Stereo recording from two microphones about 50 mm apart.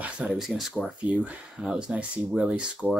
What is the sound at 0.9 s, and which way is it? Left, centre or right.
Speech, right.